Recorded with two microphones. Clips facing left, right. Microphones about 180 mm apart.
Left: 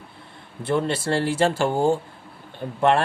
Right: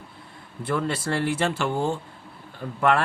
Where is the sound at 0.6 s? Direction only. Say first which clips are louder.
Left 3 dB; 25° left (ahead or behind).